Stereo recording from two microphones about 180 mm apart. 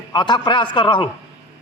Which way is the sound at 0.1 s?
25° left (ahead or behind).